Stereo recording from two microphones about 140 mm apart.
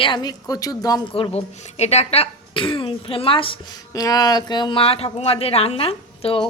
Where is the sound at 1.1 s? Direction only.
40° left (ahead or behind).